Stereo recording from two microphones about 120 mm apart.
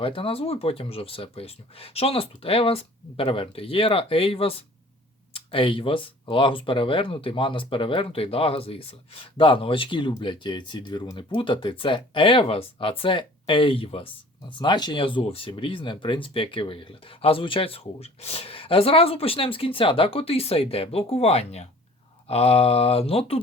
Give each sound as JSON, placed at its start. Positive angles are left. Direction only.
{"t": 0.0, "sound": "speech", "side_deg": 50}